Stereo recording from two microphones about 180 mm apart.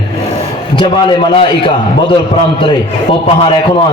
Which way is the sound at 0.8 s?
25° left (ahead or behind).